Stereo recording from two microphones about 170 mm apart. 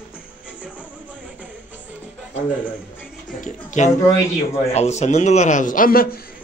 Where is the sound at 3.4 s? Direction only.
45° left (ahead or behind).